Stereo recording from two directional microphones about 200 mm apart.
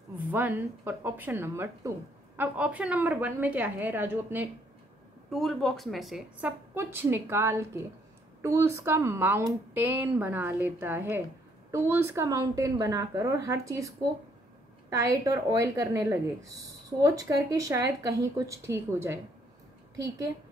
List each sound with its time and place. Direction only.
0.3 s speech: 10° right (ahead or behind)
5.3 s speech: centre (ahead or behind); by 13.8 s 15° right (ahead or behind)
14.9 s speech: 15° right (ahead or behind)